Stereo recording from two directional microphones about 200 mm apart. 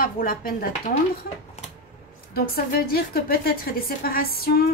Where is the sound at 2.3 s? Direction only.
50° left (ahead or behind).